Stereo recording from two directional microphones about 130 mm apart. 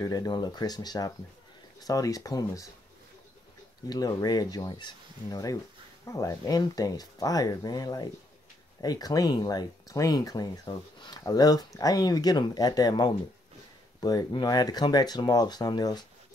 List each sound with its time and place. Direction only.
0.0 s speech: 30° left (ahead or behind)
3.9 s speech: 30° left (ahead or behind)